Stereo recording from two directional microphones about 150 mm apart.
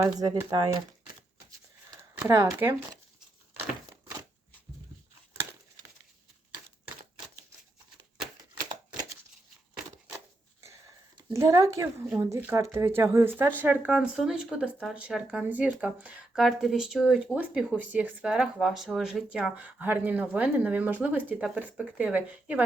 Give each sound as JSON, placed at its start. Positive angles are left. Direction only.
{"t": 0.0, "sound": "speech", "side_deg": -20}
{"t": 1.9, "sound": "a sound", "side_deg": -15}
{"t": 2.5, "sound": "speech", "side_deg": -15}
{"t": 11.3, "sound": "speech", "side_deg": -20}